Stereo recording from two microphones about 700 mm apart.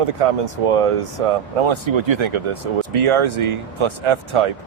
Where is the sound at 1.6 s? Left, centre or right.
Right.